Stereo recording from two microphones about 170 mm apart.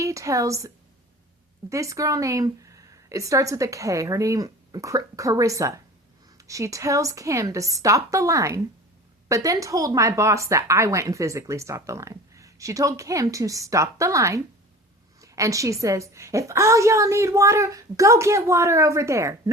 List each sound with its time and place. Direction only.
0.0 s speech: 20° right (ahead or behind)
1.7 s a woman's voice: 20° right (ahead or behind)